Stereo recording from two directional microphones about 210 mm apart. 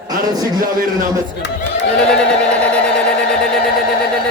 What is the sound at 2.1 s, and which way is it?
Speech, 5° left (ahead or behind).